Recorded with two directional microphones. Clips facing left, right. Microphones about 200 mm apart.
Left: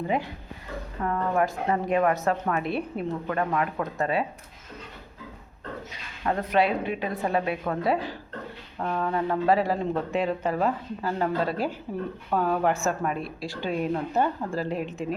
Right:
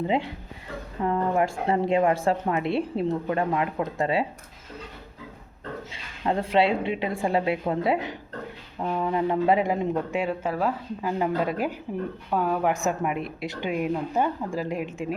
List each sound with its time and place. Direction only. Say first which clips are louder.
1.0 s a woman's voice: right 2 dB; 20° right (ahead or behind)
5.9 s a woman's voice: right 2 dB; 25° right (ahead or behind); by 15.0 s 10° right (ahead or behind)